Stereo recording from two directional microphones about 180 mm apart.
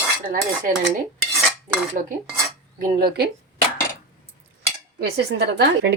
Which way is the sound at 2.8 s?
60° right (ahead or behind).